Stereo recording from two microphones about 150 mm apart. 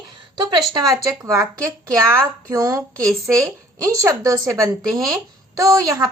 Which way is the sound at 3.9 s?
25° right (ahead or behind).